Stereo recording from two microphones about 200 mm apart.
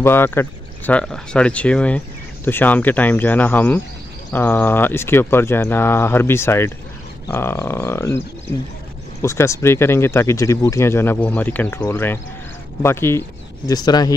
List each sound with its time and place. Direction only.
0.0 s speech: 10° left (ahead or behind)
9.2 s speech: 15° left (ahead or behind)